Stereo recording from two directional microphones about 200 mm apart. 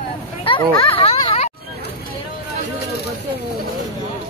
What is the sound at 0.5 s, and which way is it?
Speech, 25° left (ahead or behind).